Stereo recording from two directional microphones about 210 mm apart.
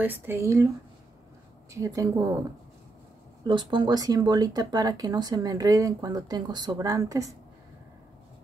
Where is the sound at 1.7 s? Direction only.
15° right (ahead or behind).